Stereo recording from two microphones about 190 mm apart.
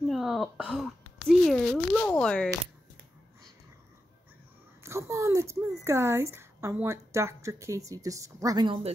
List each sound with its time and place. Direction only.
0.0 s throat clearing: centre (ahead or behind)
1.4 s a sound: 5° left (ahead or behind)
4.8 s a woman's voice: 15° right (ahead or behind)